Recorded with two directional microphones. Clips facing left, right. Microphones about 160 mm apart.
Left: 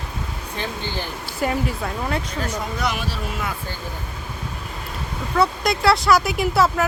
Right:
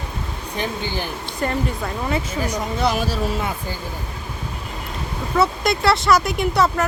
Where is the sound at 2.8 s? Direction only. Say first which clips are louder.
Right 7 dB; 35° right (ahead or behind).